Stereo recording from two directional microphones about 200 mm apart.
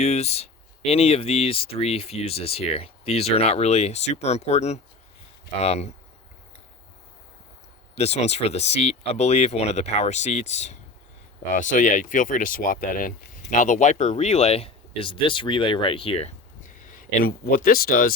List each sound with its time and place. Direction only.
0.0 s speech: 35° left (ahead or behind)
7.9 s speech: 30° left (ahead or behind)
16.8 s speech: 40° left (ahead or behind)